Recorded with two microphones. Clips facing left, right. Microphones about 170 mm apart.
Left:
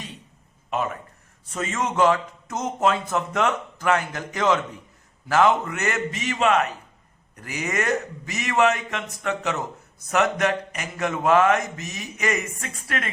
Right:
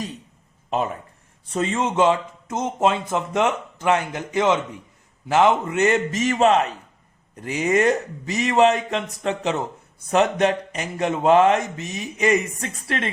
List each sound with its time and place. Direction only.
0.7 s speech: 30° right (ahead or behind)
6.5 s a man's voice: 30° right (ahead or behind)